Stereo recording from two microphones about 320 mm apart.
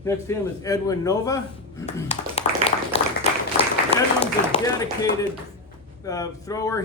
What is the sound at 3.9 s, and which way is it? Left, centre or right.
Applause, centre.